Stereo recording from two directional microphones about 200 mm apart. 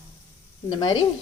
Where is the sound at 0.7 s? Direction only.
25° left (ahead or behind).